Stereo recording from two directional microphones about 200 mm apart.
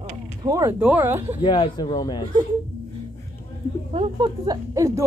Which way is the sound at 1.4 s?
25° left (ahead or behind).